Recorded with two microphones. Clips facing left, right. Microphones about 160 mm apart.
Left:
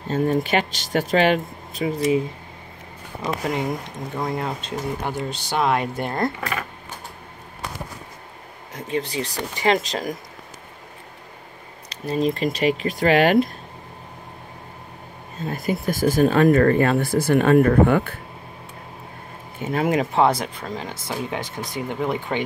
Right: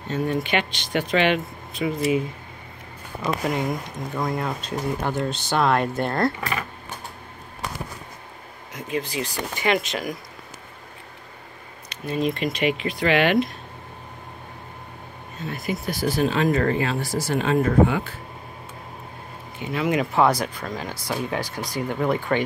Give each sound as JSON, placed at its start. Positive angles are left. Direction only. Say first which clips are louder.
{"t": 0.1, "sound": "speech", "louder": "left 3 dB", "side_deg": 40}
{"t": 3.5, "sound": "speech", "louder": "even", "side_deg": 30}
{"t": 5.0, "sound": "speech", "louder": "right 2 dB", "side_deg": 10}
{"t": 8.7, "sound": "speech", "louder": "left 2 dB", "side_deg": 30}
{"t": 11.9, "sound": "speech", "louder": "left 2 dB", "side_deg": 35}
{"t": 15.4, "sound": "speech", "louder": "left 4 dB", "side_deg": 40}
{"t": 19.6, "sound": "speech", "louder": "left 2 dB", "side_deg": 45}